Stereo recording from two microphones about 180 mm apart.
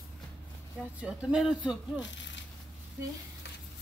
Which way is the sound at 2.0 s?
90° left.